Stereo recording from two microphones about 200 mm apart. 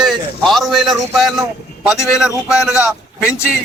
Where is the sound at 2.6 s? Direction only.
5° right (ahead or behind).